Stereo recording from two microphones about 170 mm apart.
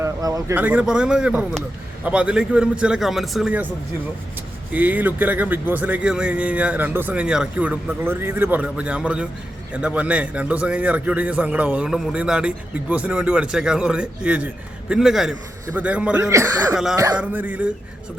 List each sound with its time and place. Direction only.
0.0 s a sound: 20° right (ahead or behind)
0.5 s a man's voice: 10° right (ahead or behind)
4.7 s a man's voice: 10° right (ahead or behind)
17.2 s a man's voice: 10° right (ahead or behind)